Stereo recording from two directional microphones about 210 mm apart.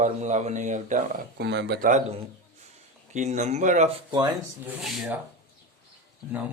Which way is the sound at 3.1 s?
35° right (ahead or behind).